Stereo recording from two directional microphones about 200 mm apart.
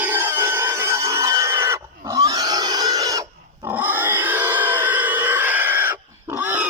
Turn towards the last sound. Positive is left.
turn(degrees=-10)  # may be behind; listen again after turning